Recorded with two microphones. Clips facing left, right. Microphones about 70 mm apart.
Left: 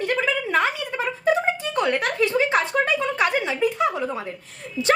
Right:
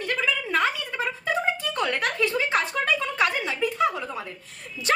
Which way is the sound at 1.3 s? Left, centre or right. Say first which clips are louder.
Left 6 dB; left.